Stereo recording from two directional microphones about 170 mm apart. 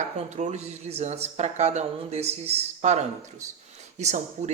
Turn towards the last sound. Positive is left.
turn(degrees=-40)  # may be behind; listen again after turning